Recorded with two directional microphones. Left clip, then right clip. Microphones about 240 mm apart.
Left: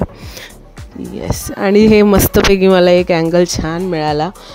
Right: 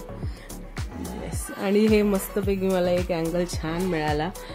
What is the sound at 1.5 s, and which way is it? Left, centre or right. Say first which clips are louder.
Speech: left 11 dB; left.